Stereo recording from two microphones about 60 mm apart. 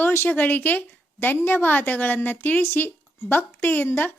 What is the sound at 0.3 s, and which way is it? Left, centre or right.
A woman's voice, left.